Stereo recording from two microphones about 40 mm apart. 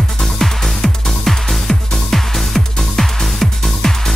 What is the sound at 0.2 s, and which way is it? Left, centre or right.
Music, centre.